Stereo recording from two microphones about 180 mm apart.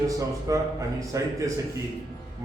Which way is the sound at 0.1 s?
20° right (ahead or behind).